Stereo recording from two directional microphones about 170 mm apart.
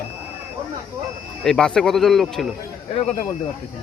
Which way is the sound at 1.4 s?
5° left (ahead or behind).